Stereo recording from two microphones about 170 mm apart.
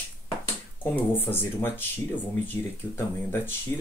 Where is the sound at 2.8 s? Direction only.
25° left (ahead or behind).